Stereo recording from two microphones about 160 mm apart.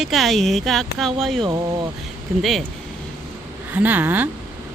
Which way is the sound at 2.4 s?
Centre (ahead or behind).